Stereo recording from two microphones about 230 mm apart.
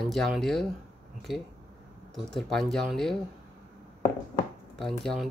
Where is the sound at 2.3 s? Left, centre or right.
Centre.